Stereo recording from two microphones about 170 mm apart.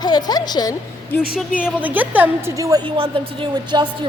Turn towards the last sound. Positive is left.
turn(degrees=-25)  # may be behind; listen again after turning